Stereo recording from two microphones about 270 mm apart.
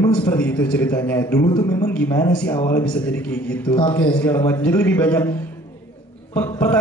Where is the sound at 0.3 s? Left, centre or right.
Centre.